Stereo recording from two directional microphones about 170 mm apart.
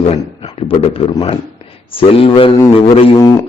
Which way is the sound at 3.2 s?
20° left (ahead or behind).